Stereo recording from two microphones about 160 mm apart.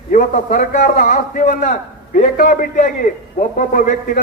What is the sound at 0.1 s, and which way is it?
Speech, 60° left (ahead or behind).